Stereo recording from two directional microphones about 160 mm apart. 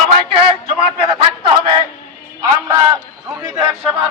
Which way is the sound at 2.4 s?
25° right (ahead or behind).